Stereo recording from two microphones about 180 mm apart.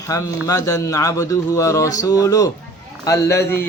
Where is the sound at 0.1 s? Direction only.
20° left (ahead or behind).